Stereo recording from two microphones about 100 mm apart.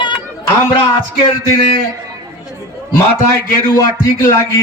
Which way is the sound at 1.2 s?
60° left (ahead or behind).